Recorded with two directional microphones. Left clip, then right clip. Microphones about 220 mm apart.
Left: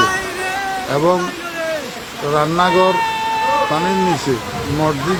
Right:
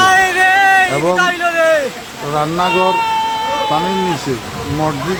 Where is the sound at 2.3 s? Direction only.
5° left (ahead or behind).